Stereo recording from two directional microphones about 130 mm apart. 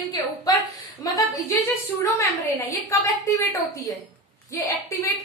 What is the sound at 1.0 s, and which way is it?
A woman's voice, 25° left (ahead or behind).